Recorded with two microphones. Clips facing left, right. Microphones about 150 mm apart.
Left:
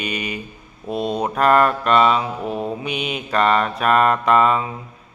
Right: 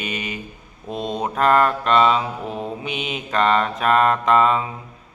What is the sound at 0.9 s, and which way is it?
Speech, 10° left (ahead or behind).